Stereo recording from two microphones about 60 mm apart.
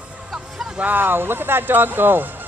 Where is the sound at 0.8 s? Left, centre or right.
Right.